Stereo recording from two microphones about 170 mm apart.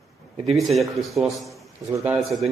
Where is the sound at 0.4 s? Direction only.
Centre (ahead or behind).